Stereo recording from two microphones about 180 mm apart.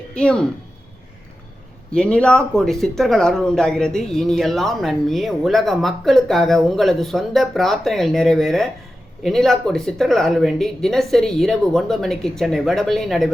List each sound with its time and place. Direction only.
0.1 s speech: 5° left (ahead or behind)
1.9 s speech: 5° left (ahead or behind)